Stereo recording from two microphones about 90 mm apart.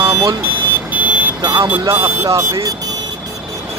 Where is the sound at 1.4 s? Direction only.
55° right (ahead or behind).